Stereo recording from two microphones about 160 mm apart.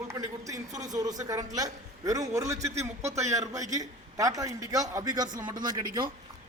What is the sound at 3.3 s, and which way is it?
A man's voice, 20° right (ahead or behind).